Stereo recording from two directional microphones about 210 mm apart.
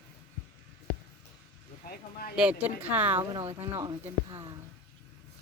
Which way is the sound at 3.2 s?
20° right (ahead or behind).